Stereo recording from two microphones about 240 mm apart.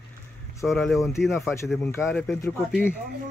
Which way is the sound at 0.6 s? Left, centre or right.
Centre.